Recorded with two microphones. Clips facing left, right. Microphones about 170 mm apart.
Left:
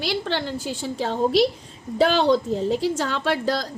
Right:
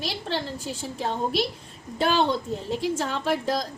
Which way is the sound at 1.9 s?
90° left.